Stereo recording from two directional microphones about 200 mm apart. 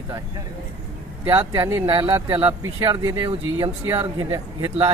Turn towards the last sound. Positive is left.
turn(degrees=-15)  # may be behind; listen again after turning